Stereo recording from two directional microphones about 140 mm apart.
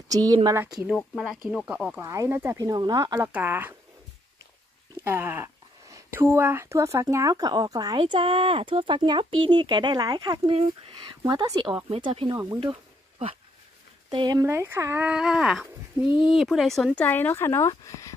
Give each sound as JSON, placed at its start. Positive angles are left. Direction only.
{"t": 0.1, "sound": "speech", "side_deg": -25}
{"t": 0.8, "sound": "speech", "side_deg": 0}
{"t": 2.0, "sound": "speech", "side_deg": -20}
{"t": 3.3, "sound": "speech", "side_deg": -10}
{"t": 5.0, "sound": "speech", "side_deg": -15}
{"t": 8.0, "sound": "speech", "side_deg": -40}
{"t": 11.9, "sound": "speech", "side_deg": -40}
{"t": 14.1, "sound": "speech", "side_deg": -30}